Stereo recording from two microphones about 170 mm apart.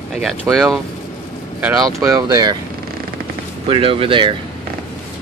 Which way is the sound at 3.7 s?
30° right (ahead or behind).